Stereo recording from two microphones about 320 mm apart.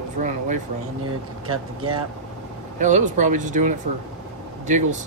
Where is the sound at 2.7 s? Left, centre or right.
Right.